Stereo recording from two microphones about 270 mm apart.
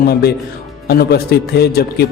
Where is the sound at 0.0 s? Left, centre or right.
Left.